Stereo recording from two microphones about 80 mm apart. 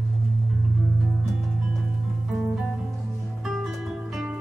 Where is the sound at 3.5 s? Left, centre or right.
Centre.